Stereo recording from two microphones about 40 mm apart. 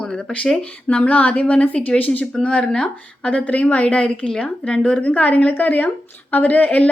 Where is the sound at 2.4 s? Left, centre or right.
Left.